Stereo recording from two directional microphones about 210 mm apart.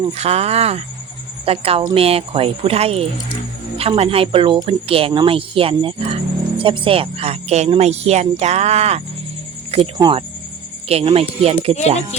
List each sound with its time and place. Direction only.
0.0 s speech: 30° right (ahead or behind)